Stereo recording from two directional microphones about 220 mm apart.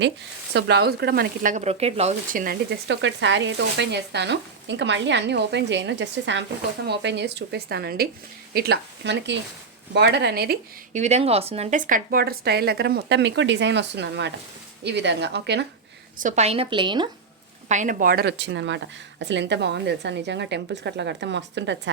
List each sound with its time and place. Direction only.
0.5 s speech: 50° right (ahead or behind)
10.9 s speech: 30° right (ahead or behind); by 15.6 s 50° right (ahead or behind)
16.1 s speech: 35° right (ahead or behind)
17.7 s speech: 35° right (ahead or behind); by 21.9 s 55° right (ahead or behind)